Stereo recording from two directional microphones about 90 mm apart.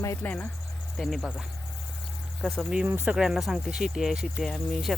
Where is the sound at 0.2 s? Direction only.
15° left (ahead or behind).